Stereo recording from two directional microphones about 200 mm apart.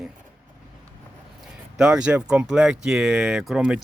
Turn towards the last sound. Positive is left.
turn(degrees=-5)  # may be behind; listen again after turning